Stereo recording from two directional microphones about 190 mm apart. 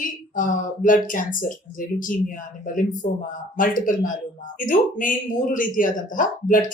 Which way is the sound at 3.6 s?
45° left (ahead or behind).